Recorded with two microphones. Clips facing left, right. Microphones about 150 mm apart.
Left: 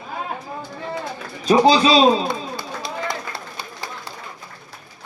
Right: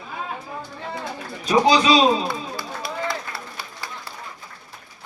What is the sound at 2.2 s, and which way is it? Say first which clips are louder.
Run: left 2 dB; 20° left (ahead or behind).